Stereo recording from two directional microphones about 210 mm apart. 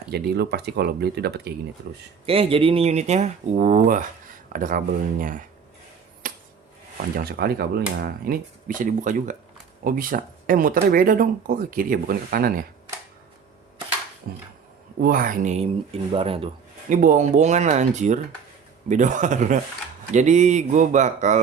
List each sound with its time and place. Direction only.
0.1 s speech: 50° right (ahead or behind)
2.2 s speech: 25° right (ahead or behind)
6.2 s a sound: 40° right (ahead or behind)
7.2 s speech: 50° right (ahead or behind)
14.3 s speech: 45° right (ahead or behind); by 16.5 s 25° right (ahead or behind)
16.9 s speech: 40° right (ahead or behind)